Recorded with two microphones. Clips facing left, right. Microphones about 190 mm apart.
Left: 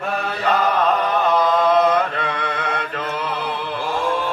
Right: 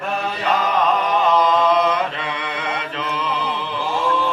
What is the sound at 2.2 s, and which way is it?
Mantra, 50° left (ahead or behind).